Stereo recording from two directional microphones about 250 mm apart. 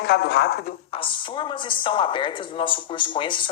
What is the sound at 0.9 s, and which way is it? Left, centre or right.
Speech, centre.